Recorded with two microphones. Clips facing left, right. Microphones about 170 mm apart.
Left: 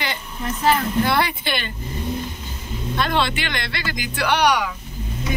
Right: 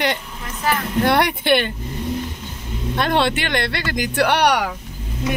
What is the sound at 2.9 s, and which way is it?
Speech, 60° right (ahead or behind).